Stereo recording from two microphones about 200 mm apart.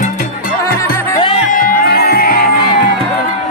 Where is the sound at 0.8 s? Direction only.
15° left (ahead or behind).